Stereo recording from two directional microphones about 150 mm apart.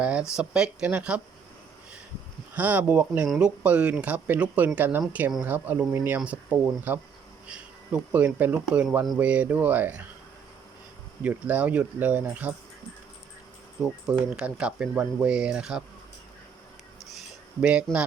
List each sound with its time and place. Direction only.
0.0 s a sound: 10° right (ahead or behind)
0.3 s speech: 5° right (ahead or behind)
2.6 s speech: 10° right (ahead or behind)
11.2 s speech: 10° right (ahead or behind)
14.1 s speech: 5° right (ahead or behind)
17.6 s speech: 5° right (ahead or behind)